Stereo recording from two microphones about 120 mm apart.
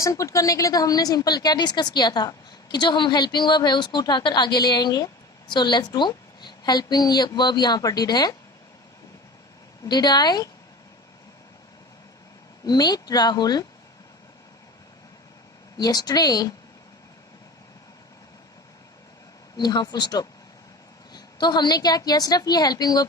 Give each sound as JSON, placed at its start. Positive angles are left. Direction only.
{"t": 0.0, "sound": "a woman's voice", "side_deg": 25}
{"t": 9.8, "sound": "a woman's voice", "side_deg": 35}
{"t": 12.6, "sound": "a woman's voice", "side_deg": 35}
{"t": 15.8, "sound": "a woman's voice", "side_deg": 35}
{"t": 19.5, "sound": "a woman's voice", "side_deg": 35}